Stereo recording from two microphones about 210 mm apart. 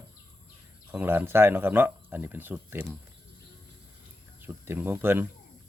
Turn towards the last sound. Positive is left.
turn(degrees=-10)  # may be behind; listen again after turning